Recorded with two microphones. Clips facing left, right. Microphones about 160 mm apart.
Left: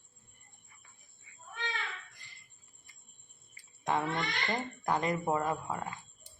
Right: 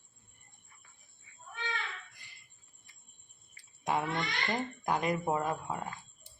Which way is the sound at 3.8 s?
10° right (ahead or behind).